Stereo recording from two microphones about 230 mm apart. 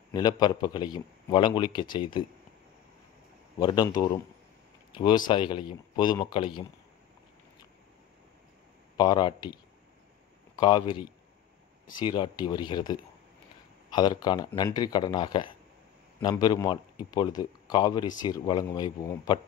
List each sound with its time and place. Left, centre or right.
0.1 s a man's voice: centre
3.5 s a man's voice: centre
8.9 s a man's voice: centre